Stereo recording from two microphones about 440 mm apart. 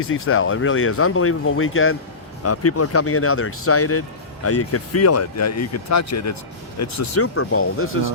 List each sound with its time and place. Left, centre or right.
0.0 s speech: left